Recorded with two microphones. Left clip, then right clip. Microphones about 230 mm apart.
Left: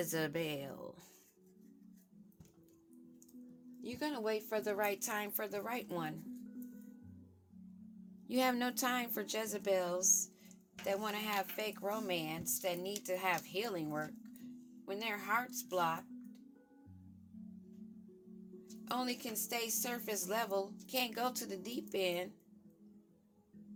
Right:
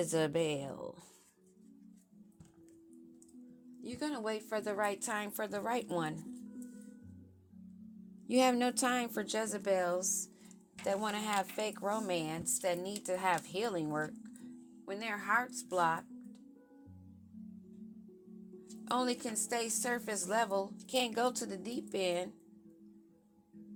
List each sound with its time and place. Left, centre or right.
0.0 s a woman's voice: centre
3.8 s a woman's voice: centre; by 6.1 s right
8.3 s a woman's voice: centre
18.9 s a woman's voice: centre